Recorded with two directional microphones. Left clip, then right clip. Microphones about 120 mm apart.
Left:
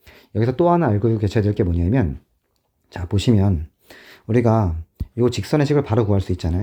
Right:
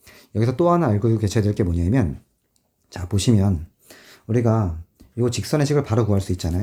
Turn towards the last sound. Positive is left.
turn(degrees=35)  # may be behind; listen again after turning